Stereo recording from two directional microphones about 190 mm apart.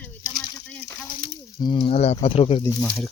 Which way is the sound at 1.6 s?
25° left (ahead or behind).